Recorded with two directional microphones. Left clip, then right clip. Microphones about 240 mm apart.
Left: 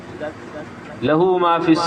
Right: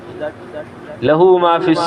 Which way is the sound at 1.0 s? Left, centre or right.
Right.